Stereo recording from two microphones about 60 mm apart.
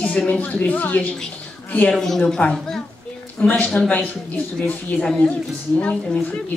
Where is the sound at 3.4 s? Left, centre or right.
Left.